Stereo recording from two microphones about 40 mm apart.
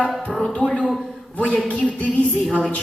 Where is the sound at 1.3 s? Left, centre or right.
Left.